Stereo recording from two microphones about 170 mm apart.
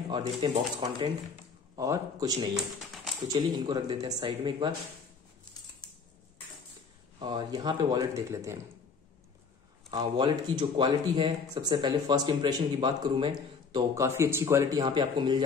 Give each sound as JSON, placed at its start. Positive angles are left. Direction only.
{"t": 0.1, "sound": "speech", "side_deg": -25}
{"t": 2.5, "sound": "a sound", "side_deg": 0}
{"t": 3.3, "sound": "speech", "side_deg": -25}
{"t": 7.2, "sound": "speech", "side_deg": -25}
{"t": 9.8, "sound": "speech", "side_deg": -25}